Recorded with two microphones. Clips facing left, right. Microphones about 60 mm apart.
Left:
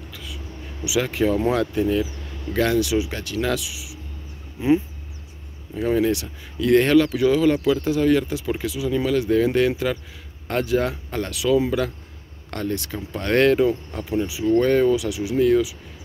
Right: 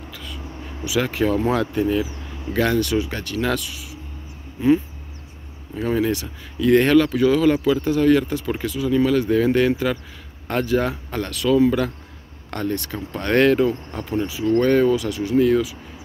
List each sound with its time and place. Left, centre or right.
0.1 s a sound: centre
0.5 s a sound: right
0.8 s speech: centre
2.2 s vehicle: centre
2.5 s speech: centre
5.8 s speech: centre
14.4 s speech: centre
14.7 s speech: centre